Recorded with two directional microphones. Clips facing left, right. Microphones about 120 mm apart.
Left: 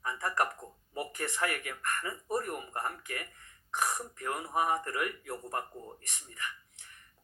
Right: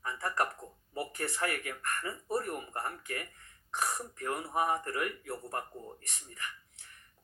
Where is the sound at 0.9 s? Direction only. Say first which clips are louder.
Even; 20° left (ahead or behind).